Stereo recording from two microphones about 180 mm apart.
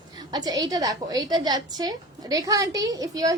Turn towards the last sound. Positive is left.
turn(degrees=-20)  # may be behind; listen again after turning